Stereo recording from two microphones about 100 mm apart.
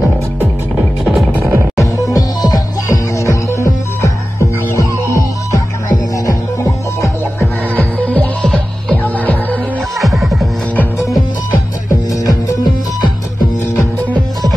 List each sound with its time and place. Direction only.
1.4 s music: 30° right (ahead or behind)
1.8 s music: 35° left (ahead or behind)
6.1 s music: 30° left (ahead or behind)
8.1 s music: 15° left (ahead or behind)
9.9 s music: centre (ahead or behind)